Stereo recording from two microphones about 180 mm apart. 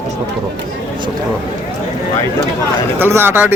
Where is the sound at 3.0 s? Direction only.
10° right (ahead or behind).